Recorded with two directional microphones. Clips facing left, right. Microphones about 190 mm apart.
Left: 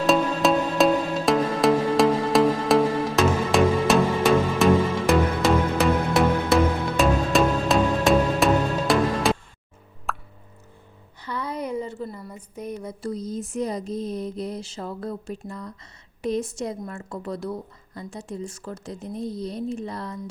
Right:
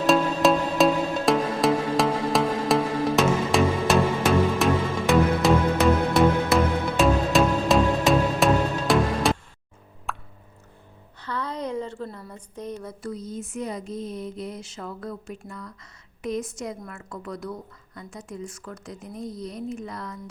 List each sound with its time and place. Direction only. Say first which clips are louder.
0.0 s music: even; centre (ahead or behind)
10.1 s plop: left 2 dB; centre (ahead or behind)
11.2 s a sound: left 1 dB; 10° left (ahead or behind)
13.0 s a woman's voice: left 3 dB; 35° left (ahead or behind)